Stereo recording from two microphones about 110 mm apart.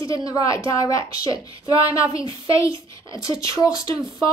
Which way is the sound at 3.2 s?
30° left (ahead or behind).